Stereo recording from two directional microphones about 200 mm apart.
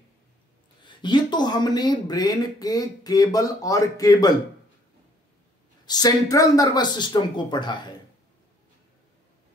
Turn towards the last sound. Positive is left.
turn(degrees=20)  # may be behind; listen again after turning